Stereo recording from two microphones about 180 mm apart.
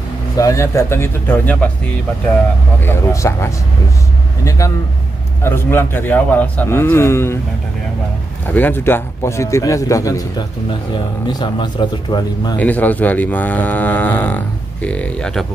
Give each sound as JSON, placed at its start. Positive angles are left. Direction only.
{"t": 0.4, "sound": "speech", "side_deg": 15}
{"t": 2.8, "sound": "speech", "side_deg": 15}
{"t": 8.5, "sound": "speech", "side_deg": 10}
{"t": 11.2, "sound": "speech", "side_deg": 25}
{"t": 12.5, "sound": "speech", "side_deg": 10}